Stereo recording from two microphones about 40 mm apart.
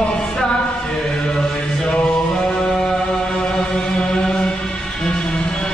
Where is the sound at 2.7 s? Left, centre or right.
Left.